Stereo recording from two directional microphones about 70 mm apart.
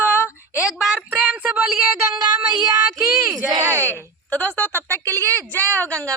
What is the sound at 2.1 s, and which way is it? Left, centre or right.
Child singing, right.